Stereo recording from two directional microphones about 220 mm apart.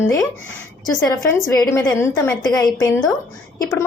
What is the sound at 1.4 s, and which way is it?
A woman's voice, 15° left (ahead or behind).